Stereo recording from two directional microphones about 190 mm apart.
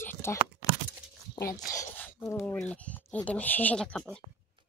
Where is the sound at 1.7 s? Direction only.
15° left (ahead or behind).